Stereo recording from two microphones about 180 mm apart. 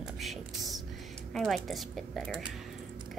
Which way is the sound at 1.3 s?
Centre (ahead or behind).